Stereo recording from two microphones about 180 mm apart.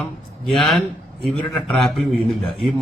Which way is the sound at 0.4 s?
5° left (ahead or behind).